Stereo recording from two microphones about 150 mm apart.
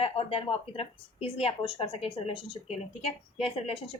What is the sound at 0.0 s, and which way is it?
A woman's voice, 40° left (ahead or behind).